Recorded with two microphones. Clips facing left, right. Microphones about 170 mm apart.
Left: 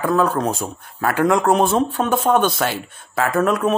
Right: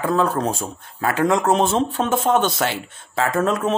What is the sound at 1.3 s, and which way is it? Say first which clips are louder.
Speech: left 2 dB; 20° right (ahead or behind).